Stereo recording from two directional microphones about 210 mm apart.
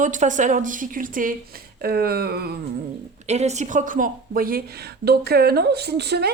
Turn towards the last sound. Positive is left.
turn(degrees=-50)  # may be behind; listen again after turning